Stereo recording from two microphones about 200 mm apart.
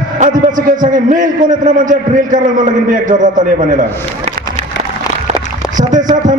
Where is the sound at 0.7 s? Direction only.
40° right (ahead or behind).